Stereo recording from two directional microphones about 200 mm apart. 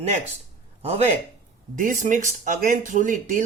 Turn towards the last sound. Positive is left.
turn(degrees=-40)  # may be behind; listen again after turning